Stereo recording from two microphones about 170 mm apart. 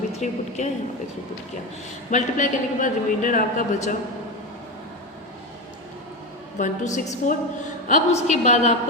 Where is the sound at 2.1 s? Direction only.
50° left (ahead or behind).